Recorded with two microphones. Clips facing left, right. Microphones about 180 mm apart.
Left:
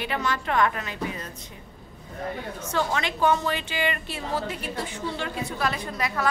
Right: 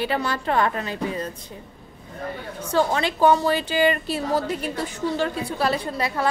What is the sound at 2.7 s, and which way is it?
A woman's voice, 35° right (ahead or behind).